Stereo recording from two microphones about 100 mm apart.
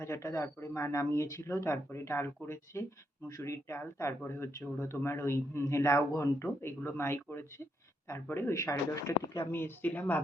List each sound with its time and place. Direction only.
0.0 s a man's voice: 30° left (ahead or behind)